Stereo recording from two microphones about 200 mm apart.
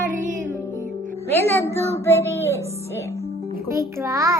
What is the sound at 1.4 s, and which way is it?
A woman's voice, 15° left (ahead or behind).